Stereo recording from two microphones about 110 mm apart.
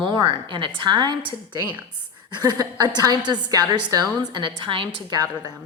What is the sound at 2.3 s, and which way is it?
A woman's voice, 40° right (ahead or behind).